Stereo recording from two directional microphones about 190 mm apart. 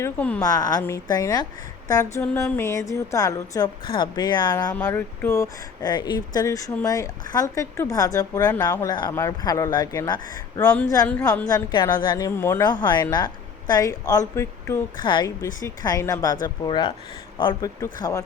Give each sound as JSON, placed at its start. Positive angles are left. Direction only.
{"t": 0.0, "sound": "speech", "side_deg": 5}
{"t": 0.4, "sound": "speech", "side_deg": 20}
{"t": 2.2, "sound": "speech", "side_deg": 10}
{"t": 4.7, "sound": "speech", "side_deg": 10}
{"t": 10.6, "sound": "speech", "side_deg": 5}
{"t": 11.4, "sound": "speech", "side_deg": 20}